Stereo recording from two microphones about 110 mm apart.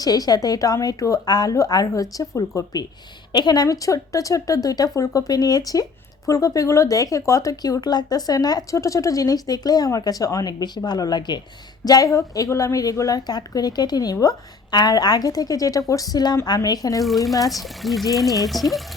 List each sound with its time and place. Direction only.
0.0 s speech: 35° left (ahead or behind)
17.0 s speech: centre (ahead or behind)